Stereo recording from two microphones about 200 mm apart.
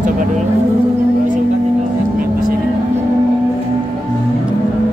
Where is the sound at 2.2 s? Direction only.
45° right (ahead or behind).